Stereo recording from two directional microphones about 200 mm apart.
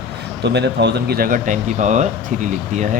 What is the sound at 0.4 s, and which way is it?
Speech, 60° right (ahead or behind).